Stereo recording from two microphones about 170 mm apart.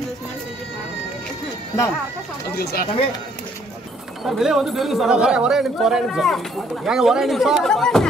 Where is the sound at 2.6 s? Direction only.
70° left (ahead or behind).